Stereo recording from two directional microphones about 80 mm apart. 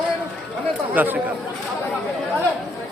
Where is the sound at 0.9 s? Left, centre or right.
Right.